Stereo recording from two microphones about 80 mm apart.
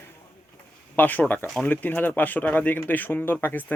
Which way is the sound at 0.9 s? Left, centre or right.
Left.